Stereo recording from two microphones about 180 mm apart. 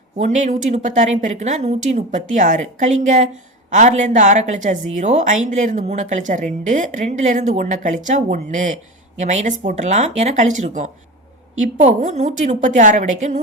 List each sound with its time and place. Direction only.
0.2 s a woman's voice: 45° right (ahead or behind)